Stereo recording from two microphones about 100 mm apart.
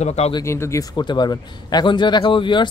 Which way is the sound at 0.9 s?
45° left (ahead or behind).